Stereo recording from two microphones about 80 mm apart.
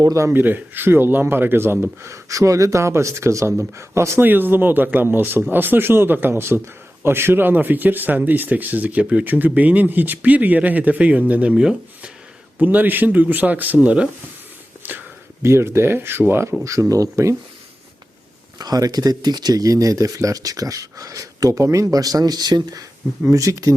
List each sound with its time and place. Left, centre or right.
0.0 s speech: right
0.3 s speech: right
2.1 s speech: right; by 12.1 s centre
12.5 s speech: right
14.8 s a sound: right
15.4 s speech: right
16.9 s speech: right
18.6 s speech: right
23.3 s speech: right